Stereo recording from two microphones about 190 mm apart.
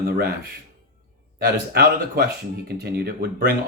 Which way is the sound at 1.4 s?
55° right (ahead or behind).